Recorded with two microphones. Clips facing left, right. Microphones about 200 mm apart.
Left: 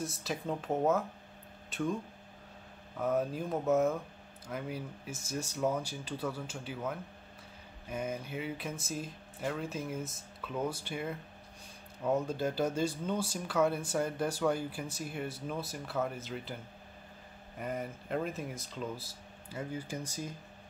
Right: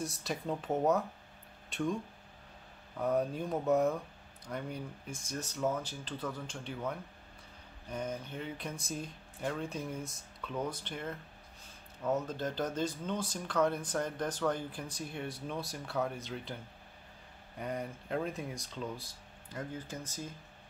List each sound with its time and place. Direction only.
0.0 s speech: centre (ahead or behind)
3.0 s speech: centre (ahead or behind)
17.6 s speech: centre (ahead or behind)